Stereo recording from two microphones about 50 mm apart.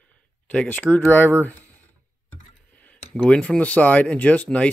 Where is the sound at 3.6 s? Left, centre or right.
Left.